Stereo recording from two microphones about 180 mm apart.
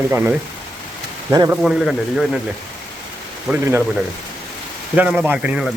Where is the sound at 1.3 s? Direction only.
15° right (ahead or behind).